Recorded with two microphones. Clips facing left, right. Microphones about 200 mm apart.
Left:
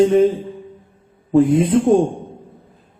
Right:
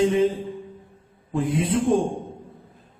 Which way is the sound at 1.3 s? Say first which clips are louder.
Left 10 dB; 40° left (ahead or behind).